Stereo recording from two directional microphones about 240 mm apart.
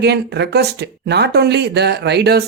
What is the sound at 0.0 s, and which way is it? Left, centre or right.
Speech, right.